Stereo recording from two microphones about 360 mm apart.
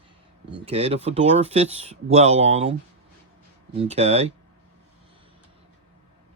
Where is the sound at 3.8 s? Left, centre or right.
Centre.